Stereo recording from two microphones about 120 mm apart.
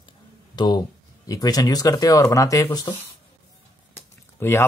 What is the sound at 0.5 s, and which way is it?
Speech, 35° left (ahead or behind).